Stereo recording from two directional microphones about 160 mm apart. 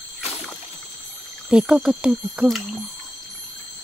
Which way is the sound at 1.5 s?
5° right (ahead or behind).